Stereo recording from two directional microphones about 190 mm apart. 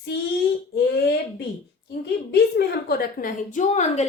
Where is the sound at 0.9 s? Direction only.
60° left (ahead or behind).